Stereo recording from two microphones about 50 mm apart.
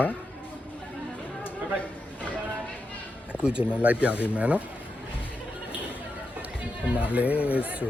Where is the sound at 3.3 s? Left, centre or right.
Centre.